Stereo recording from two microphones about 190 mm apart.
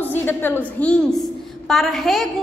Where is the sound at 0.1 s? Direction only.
10° left (ahead or behind).